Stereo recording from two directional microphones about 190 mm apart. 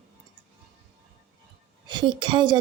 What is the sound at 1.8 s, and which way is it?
Speech, 25° right (ahead or behind).